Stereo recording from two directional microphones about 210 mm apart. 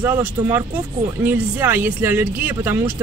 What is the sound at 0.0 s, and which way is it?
Speech, 10° right (ahead or behind).